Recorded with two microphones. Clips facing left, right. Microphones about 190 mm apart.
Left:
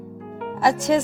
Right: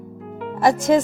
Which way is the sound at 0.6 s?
45° right (ahead or behind).